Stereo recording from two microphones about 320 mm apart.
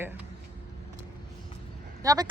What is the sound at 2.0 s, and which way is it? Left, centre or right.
Speech, centre.